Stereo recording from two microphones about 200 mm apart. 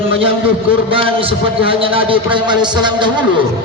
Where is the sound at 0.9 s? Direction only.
25° right (ahead or behind).